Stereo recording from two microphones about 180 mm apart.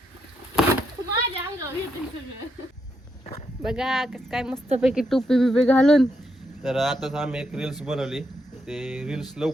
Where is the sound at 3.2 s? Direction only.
35° left (ahead or behind).